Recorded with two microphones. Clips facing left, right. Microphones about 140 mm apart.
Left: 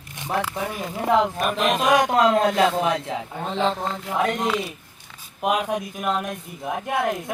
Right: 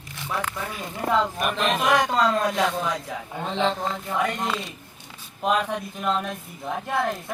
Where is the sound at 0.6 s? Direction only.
20° left (ahead or behind).